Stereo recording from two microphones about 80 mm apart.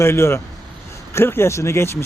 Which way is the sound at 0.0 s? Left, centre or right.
Left.